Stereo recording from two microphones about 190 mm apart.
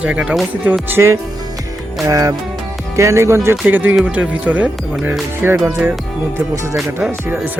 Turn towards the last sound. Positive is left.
turn(degrees=-5)  # may be behind; listen again after turning